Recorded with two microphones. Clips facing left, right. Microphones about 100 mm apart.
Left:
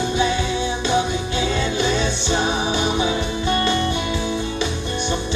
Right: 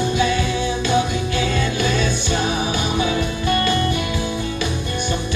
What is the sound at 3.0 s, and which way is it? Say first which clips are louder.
Music: right 1 dB; 20° left (ahead or behind).